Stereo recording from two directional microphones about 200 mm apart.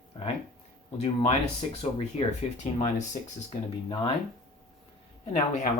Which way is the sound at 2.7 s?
35° left (ahead or behind).